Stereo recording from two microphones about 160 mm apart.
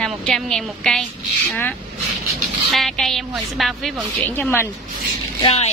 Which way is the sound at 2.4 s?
Centre (ahead or behind).